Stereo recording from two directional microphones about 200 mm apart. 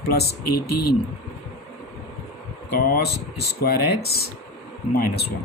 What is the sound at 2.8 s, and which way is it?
Speech, 50° left (ahead or behind).